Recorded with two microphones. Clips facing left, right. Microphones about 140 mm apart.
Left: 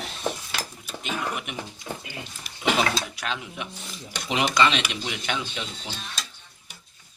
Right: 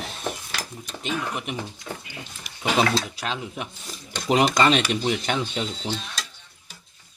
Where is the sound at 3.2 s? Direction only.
35° right (ahead or behind).